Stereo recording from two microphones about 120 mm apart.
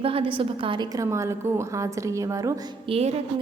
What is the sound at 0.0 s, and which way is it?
Speech, 50° right (ahead or behind).